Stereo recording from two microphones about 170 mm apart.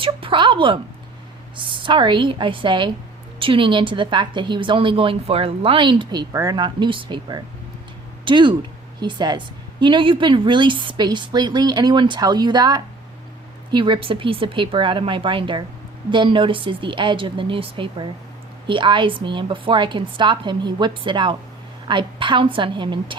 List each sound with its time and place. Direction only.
0.0 s a woman's voice: 30° right (ahead or behind)